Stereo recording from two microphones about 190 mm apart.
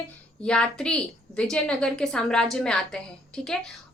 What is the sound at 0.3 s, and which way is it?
A woman's voice, 5° left (ahead or behind).